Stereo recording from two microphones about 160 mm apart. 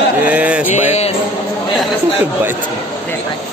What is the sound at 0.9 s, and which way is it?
Speech, 40° left (ahead or behind).